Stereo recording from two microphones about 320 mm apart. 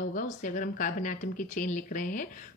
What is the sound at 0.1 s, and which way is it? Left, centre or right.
Speech, left.